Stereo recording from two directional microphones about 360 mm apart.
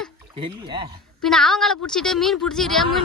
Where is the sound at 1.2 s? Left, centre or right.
Centre.